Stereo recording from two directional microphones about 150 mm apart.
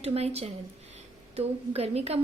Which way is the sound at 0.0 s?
45° right (ahead or behind).